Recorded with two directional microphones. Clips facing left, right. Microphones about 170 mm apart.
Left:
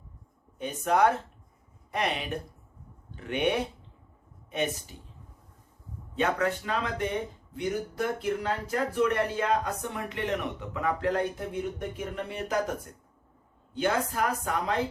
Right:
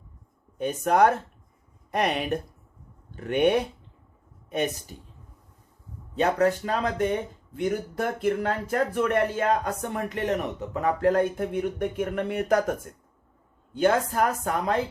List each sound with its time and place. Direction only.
0.6 s speech: 50° right (ahead or behind)
4.9 s speech: 50° right (ahead or behind)
6.1 s speech: 40° right (ahead or behind); by 12.7 s 60° right (ahead or behind)
13.7 s speech: 45° right (ahead or behind)